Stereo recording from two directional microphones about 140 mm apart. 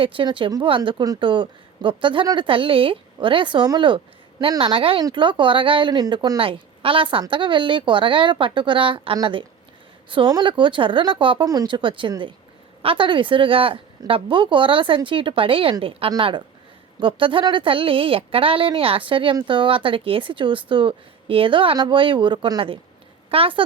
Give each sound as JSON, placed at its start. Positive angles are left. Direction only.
{"t": 0.0, "sound": "a woman's voice", "side_deg": -35}
{"t": 6.4, "sound": "a woman's voice", "side_deg": -40}